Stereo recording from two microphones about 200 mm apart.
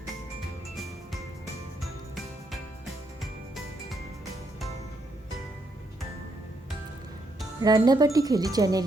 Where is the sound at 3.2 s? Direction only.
Centre (ahead or behind).